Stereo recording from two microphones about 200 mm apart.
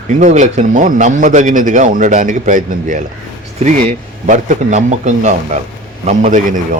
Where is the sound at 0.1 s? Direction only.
35° right (ahead or behind).